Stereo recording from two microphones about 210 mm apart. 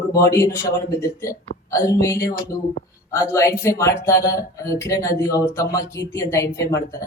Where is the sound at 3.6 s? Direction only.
15° left (ahead or behind).